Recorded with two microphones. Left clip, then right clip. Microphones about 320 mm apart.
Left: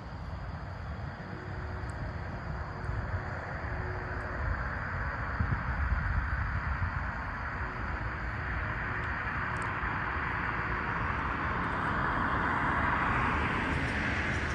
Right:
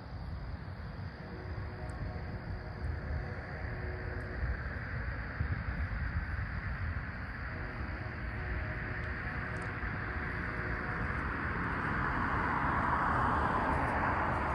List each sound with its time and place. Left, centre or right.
8.5 s vehicle: centre